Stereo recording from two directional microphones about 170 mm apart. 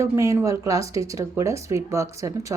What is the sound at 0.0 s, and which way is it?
A woman's voice, 20° right (ahead or behind).